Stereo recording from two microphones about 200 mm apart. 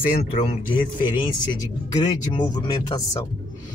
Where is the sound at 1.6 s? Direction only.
15° left (ahead or behind).